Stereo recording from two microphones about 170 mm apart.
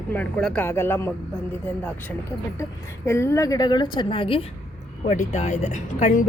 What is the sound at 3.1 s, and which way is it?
Speech, 15° left (ahead or behind).